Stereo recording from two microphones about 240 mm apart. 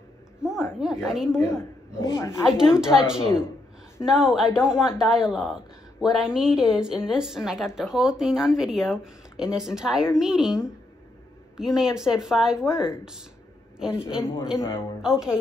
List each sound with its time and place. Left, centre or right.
0.4 s speech: centre
1.6 s a woman's voice: centre
2.4 s speech: centre
13.8 s a man's voice: left
15.0 s speech: centre